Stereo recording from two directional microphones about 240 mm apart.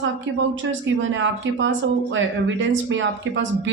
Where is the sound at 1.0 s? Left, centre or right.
Right.